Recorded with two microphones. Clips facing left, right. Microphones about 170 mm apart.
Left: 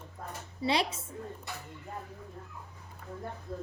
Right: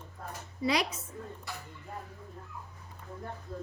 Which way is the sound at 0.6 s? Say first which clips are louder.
Even; 30° left (ahead or behind).